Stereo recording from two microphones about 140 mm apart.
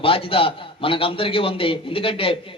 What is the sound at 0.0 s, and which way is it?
A man's voice, 40° left (ahead or behind).